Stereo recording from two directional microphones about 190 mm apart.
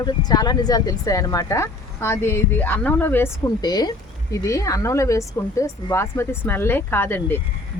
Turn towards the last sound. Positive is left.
turn(degrees=10)  # may be behind; listen again after turning